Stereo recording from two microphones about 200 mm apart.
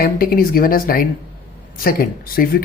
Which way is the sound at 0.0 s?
45° left (ahead or behind).